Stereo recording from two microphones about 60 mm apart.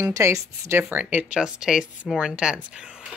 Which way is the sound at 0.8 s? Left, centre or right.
Right.